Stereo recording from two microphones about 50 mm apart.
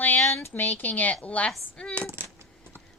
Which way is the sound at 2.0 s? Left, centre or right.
Right.